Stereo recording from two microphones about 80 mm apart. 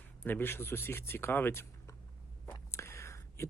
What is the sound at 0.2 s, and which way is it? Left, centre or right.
Speech, left.